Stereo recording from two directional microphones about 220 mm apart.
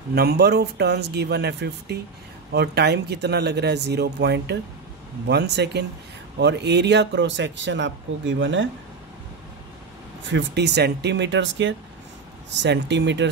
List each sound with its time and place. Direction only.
0.1 s speech: 45° right (ahead or behind)
10.2 s speech: 50° right (ahead or behind)